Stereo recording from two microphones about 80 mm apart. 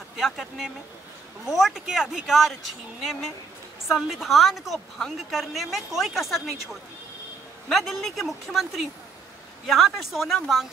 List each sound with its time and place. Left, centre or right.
0.2 s a woman's voice: centre
3.9 s a woman's voice: centre